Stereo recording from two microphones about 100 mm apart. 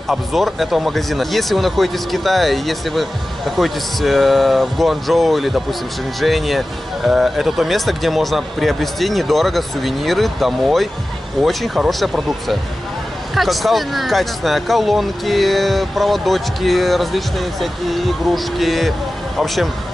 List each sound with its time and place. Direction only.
0.1 s speech: centre (ahead or behind)